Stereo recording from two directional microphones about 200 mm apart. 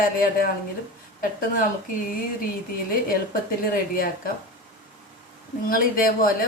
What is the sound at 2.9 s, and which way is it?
Speech, 45° left (ahead or behind).